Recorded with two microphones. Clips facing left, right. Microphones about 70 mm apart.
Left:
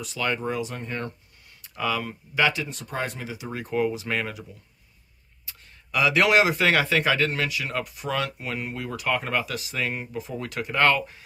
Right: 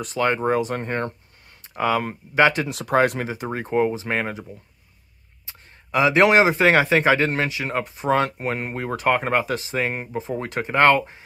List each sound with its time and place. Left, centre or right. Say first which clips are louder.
0.0 s speech: right 6 dB; right
2.7 s speech: right 12 dB; right
3.3 s speech: right 5 dB; right
5.5 s a man's voice: right 5 dB; right